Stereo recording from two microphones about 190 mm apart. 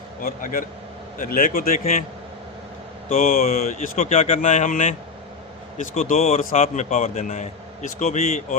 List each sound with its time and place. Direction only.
0.2 s speech: 45° left (ahead or behind)
3.1 s a man's voice: 45° left (ahead or behind)